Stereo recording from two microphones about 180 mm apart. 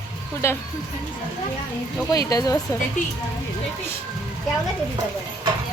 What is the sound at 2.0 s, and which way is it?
Speech, 20° left (ahead or behind).